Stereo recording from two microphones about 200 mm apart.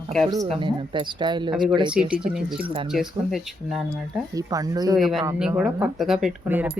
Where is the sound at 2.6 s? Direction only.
25° right (ahead or behind).